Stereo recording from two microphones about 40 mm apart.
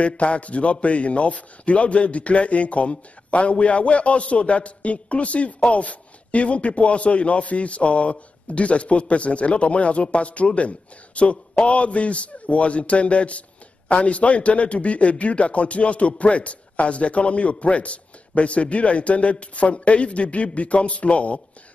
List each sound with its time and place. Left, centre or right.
0.0 s a man's voice: left